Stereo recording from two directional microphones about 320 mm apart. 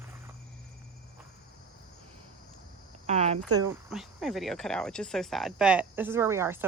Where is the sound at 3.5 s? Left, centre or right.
Centre.